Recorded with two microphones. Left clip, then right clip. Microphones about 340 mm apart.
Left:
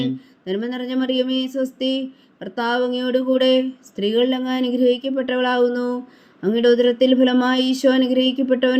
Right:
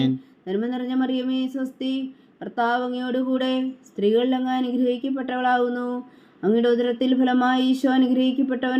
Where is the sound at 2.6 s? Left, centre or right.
Left.